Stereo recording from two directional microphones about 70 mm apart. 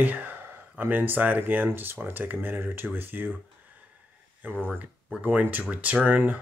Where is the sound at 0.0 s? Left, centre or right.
Right.